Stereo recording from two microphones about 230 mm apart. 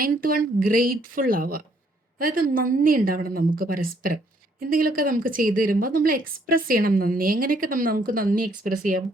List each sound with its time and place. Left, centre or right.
0.0 s a woman's voice: right